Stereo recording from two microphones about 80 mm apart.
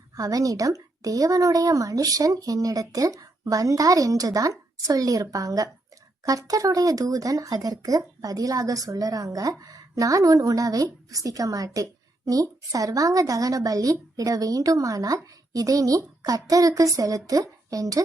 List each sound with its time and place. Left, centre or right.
0.1 s a woman's voice: right